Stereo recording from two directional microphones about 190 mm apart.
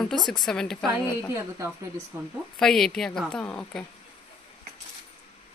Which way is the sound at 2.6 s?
5° left (ahead or behind).